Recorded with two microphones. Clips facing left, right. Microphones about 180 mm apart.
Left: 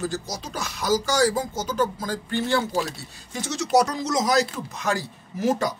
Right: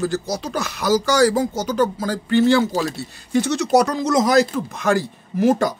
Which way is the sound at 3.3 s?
60° right (ahead or behind).